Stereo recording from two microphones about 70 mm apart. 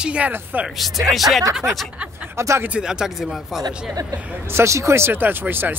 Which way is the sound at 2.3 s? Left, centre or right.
Right.